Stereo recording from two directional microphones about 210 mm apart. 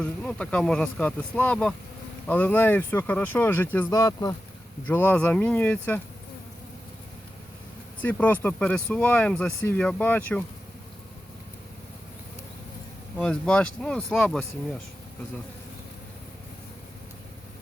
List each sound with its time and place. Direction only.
0.0 s speech: 5° left (ahead or behind)
8.0 s speech: 5° left (ahead or behind)
13.1 s speech: 5° left (ahead or behind)